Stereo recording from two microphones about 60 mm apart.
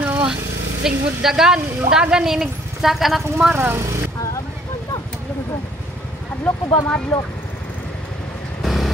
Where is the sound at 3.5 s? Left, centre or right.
Right.